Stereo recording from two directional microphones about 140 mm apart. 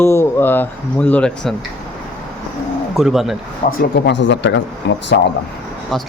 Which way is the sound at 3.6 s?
75° left (ahead or behind).